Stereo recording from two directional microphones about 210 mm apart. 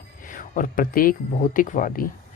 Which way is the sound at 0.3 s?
40° left (ahead or behind).